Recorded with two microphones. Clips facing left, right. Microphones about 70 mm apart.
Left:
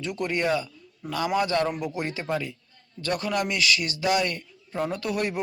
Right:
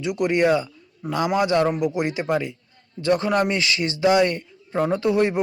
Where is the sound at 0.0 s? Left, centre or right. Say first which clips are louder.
Right 7 dB; centre.